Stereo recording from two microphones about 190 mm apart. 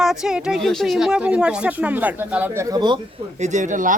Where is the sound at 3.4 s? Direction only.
40° right (ahead or behind).